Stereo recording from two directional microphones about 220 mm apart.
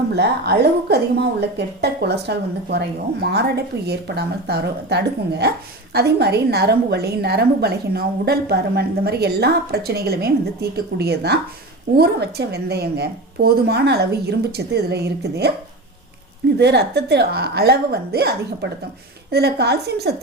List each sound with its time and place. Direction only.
0.1 s a woman's voice: 50° right (ahead or behind)
16.6 s a woman's voice: 50° right (ahead or behind)